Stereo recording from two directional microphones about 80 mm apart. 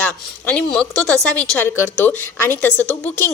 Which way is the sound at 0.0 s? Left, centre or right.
Centre.